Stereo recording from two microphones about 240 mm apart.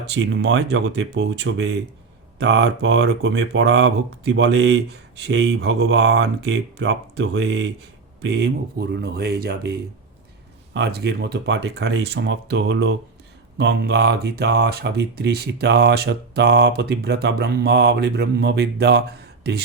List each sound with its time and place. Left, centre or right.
0.0 s speech: right
10.8 s speech: right